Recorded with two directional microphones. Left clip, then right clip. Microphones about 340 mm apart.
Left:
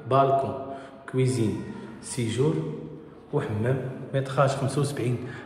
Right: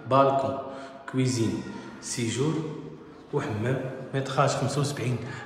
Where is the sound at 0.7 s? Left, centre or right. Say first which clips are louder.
Left 2 dB; centre.